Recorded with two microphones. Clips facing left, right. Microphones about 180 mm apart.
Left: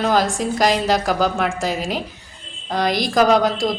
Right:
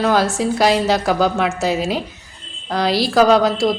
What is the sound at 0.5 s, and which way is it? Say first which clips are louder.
Speech: right 2 dB; 10° right (ahead or behind).